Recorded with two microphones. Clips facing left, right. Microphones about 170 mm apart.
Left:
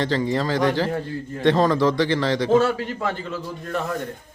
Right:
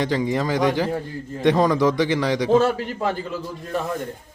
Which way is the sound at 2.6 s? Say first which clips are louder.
Right 1 dB; 40° right (ahead or behind).